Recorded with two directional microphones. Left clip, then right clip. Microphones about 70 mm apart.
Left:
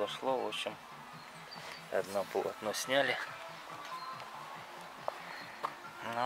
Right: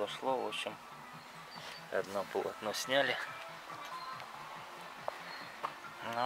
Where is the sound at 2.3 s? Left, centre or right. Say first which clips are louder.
Left 1 dB; centre.